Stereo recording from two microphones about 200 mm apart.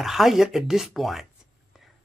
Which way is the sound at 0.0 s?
Centre (ahead or behind).